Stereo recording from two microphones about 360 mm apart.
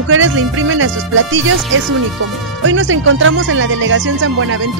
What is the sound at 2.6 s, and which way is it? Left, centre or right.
Speech, right.